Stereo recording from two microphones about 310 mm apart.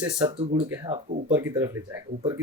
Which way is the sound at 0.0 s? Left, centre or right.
Centre.